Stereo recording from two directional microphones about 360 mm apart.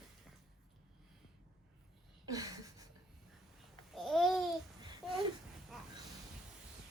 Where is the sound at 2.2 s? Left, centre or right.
Centre.